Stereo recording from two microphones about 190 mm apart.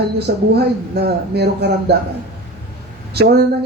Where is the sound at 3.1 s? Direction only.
55° right (ahead or behind).